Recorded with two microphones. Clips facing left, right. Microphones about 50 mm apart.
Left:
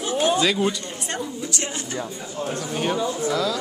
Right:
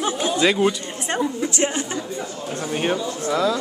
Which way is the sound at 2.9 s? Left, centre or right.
Centre.